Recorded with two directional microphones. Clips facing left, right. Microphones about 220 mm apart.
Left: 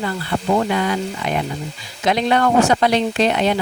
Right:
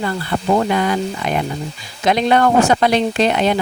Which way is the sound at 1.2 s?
50° right (ahead or behind).